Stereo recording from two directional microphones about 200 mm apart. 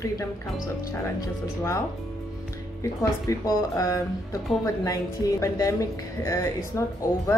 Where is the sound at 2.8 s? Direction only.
15° left (ahead or behind).